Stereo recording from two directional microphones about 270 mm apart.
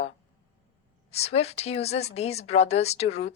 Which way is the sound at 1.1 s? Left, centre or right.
Left.